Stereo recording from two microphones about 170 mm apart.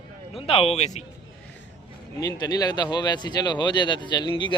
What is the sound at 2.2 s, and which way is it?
Speech, 25° left (ahead or behind).